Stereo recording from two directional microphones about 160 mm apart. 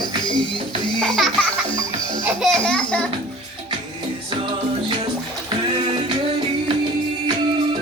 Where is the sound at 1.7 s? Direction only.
30° left (ahead or behind).